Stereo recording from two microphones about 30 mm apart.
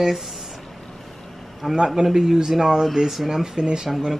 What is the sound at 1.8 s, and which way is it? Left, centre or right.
Speech, centre.